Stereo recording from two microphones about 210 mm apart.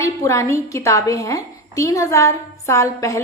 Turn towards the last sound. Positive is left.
turn(degrees=15)  # may be behind; listen again after turning